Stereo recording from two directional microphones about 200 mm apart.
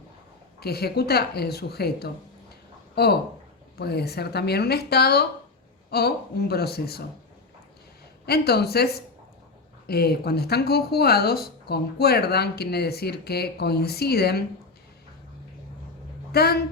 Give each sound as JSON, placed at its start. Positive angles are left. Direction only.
{"t": 0.6, "sound": "speech", "side_deg": 50}
{"t": 8.3, "sound": "speech", "side_deg": 55}
{"t": 16.3, "sound": "speech", "side_deg": 50}